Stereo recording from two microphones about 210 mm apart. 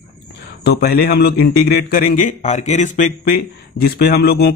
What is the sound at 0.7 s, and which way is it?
A man's voice, 50° left (ahead or behind).